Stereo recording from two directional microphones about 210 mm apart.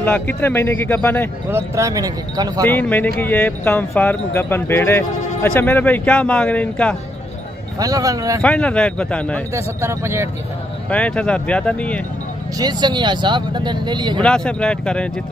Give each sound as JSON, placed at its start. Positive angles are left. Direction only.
{"t": 0.0, "sound": "speech", "side_deg": 10}
{"t": 1.5, "sound": "speech", "side_deg": -15}
{"t": 2.6, "sound": "speech", "side_deg": 10}
{"t": 7.8, "sound": "speech", "side_deg": -15}
{"t": 8.4, "sound": "speech", "side_deg": 5}
{"t": 9.5, "sound": "speech", "side_deg": -15}
{"t": 10.9, "sound": "speech", "side_deg": 5}
{"t": 12.5, "sound": "speech", "side_deg": -20}
{"t": 14.2, "sound": "speech", "side_deg": 5}